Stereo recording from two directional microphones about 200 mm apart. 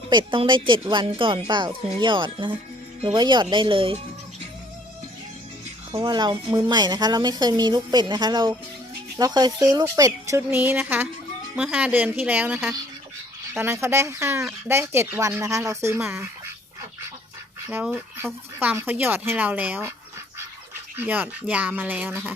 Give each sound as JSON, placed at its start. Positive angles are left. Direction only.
{"t": 0.1, "sound": "speech", "side_deg": -25}
{"t": 6.0, "sound": "speech", "side_deg": -20}
{"t": 17.7, "sound": "speech", "side_deg": -10}
{"t": 20.9, "sound": "speech", "side_deg": -10}